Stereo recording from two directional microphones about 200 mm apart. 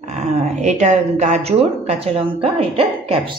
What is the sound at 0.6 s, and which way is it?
Speech, 35° right (ahead or behind).